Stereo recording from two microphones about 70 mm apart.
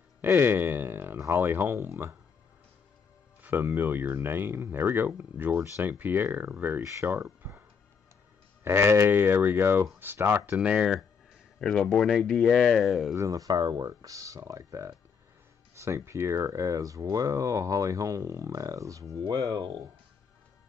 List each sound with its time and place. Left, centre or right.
0.2 s speech: right
3.4 s speech: right
6.8 s speech: right
7.1 s speech: right
8.6 s speech: right
10.5 s speech: centre
11.6 s speech: centre
13.1 s speech: right
19.2 s speech: right